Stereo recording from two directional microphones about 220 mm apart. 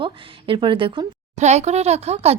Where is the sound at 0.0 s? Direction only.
25° right (ahead or behind).